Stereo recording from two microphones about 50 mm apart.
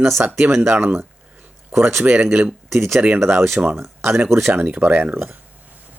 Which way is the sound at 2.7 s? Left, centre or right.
Right.